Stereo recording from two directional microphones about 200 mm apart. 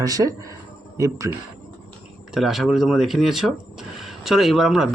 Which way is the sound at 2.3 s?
Centre (ahead or behind).